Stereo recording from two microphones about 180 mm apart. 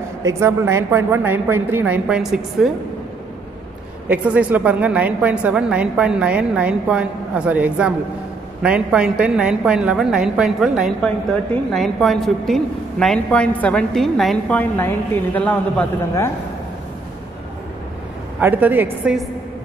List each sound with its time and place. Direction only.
0.2 s a woman's voice: 15° right (ahead or behind)
4.1 s a woman's voice: 10° right (ahead or behind); by 16.3 s 10° left (ahead or behind)
18.4 s a woman's voice: 10° right (ahead or behind)